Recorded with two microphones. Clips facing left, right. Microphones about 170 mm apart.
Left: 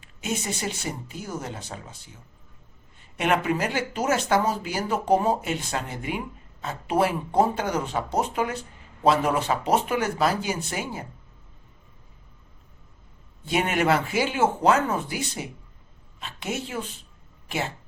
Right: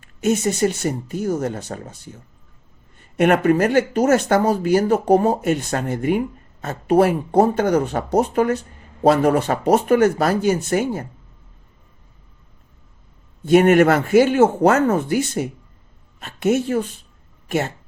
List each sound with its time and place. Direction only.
0.0 s speech: 50° right (ahead or behind)
13.4 s speech: 50° right (ahead or behind)